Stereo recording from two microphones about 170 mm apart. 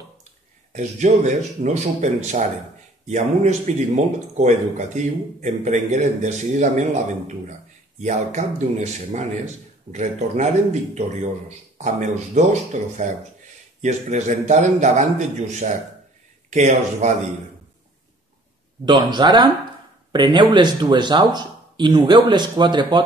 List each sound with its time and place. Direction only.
0.7 s speech: 45° right (ahead or behind)
18.9 s speech: 25° right (ahead or behind)